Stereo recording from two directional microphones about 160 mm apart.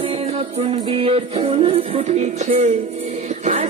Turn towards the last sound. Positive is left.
turn(degrees=-45)  # may be behind; listen again after turning